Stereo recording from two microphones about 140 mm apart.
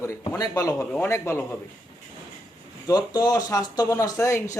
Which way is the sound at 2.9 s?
30° left (ahead or behind).